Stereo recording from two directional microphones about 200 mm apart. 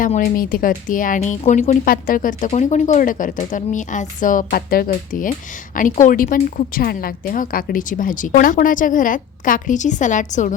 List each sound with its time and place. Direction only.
0.0 s a woman's voice: 45° left (ahead or behind)